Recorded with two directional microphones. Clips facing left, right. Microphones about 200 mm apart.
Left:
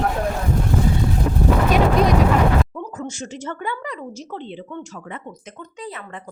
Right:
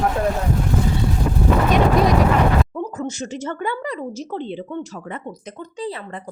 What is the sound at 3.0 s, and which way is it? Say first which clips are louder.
Speech: right 4 dB; 40° right (ahead or behind).